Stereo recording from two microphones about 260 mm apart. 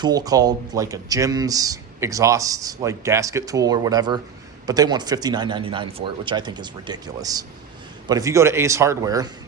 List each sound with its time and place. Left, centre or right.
0.0 s speech: centre